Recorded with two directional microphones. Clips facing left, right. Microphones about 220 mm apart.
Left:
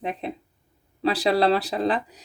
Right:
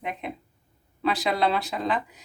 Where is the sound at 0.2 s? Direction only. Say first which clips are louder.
Left 3 dB; 35° left (ahead or behind).